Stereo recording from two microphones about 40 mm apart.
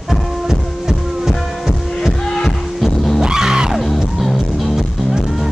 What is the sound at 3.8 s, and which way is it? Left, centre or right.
Music, centre.